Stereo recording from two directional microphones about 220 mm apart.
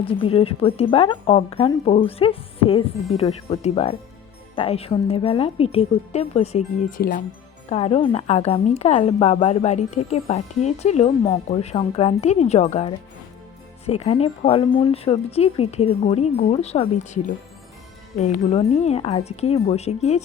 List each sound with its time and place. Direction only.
0.0 s a woman's voice: 25° left (ahead or behind)